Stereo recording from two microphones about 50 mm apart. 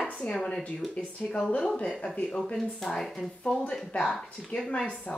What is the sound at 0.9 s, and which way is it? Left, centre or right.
Speech, left.